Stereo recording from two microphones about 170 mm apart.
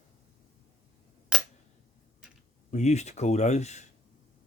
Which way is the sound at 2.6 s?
40° left (ahead or behind).